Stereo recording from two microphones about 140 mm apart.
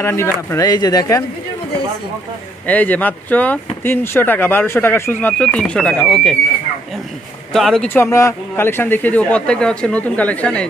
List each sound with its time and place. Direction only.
0.0 s speech: 20° left (ahead or behind)
2.6 s speech: 10° left (ahead or behind)
7.5 s speech: 5° left (ahead or behind)
7.9 s speech: 20° left (ahead or behind)